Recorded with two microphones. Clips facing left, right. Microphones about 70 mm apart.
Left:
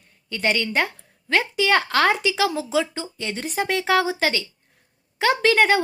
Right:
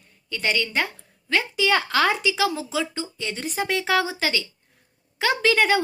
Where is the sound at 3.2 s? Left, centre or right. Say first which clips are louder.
Left 2 dB; left.